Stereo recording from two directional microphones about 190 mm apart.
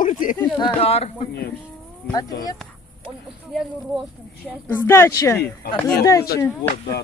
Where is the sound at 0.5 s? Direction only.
30° left (ahead or behind).